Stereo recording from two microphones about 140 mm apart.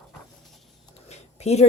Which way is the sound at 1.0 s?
50° left (ahead or behind).